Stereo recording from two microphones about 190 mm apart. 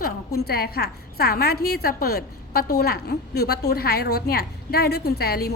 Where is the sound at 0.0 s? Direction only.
55° left (ahead or behind).